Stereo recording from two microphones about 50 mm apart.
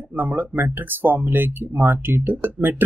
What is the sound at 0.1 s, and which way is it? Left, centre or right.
Speech, right.